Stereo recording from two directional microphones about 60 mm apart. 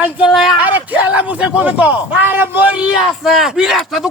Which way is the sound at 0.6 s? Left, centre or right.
Right.